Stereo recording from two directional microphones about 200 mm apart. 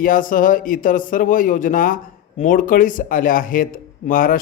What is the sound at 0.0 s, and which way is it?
A man's voice, 40° left (ahead or behind).